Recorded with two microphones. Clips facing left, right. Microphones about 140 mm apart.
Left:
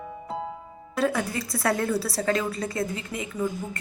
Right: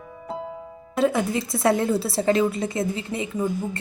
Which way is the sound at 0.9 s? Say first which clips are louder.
Right 4 dB; 25° right (ahead or behind).